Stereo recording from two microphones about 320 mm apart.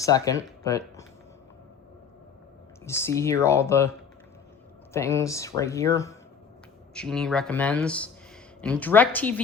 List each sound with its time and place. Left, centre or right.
0.0 s speech: centre
2.8 s speech: centre
4.9 s speech: centre